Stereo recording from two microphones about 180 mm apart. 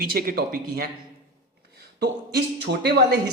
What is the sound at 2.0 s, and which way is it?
Speech, 60° right (ahead or behind).